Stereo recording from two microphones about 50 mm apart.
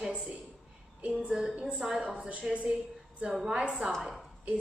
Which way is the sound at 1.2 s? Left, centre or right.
Centre.